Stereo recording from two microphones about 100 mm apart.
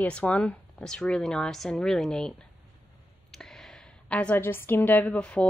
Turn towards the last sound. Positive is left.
turn(degrees=10)  # may be behind; listen again after turning